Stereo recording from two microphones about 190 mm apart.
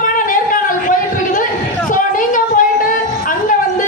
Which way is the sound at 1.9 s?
45° left (ahead or behind).